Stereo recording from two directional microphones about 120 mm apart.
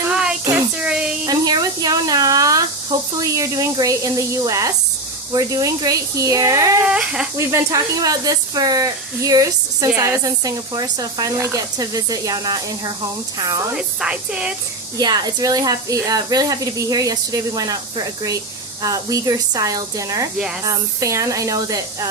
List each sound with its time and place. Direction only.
0.1 s a sound: 5° right (ahead or behind)
1.3 s a sound: 30° right (ahead or behind)
3.2 s a woman's voice: 25° right (ahead or behind)
6.8 s speech: 10° right (ahead or behind)
7.3 s a woman's voice: 25° right (ahead or behind)
13.7 s speech: 5° right (ahead or behind)
14.9 s a woman's voice: 35° right (ahead or behind)